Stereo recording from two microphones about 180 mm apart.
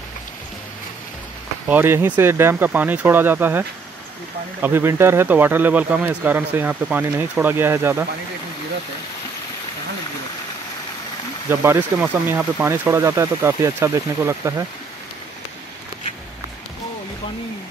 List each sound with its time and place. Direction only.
1.7 s speech: 10° right (ahead or behind)
11.4 s speech: 15° right (ahead or behind)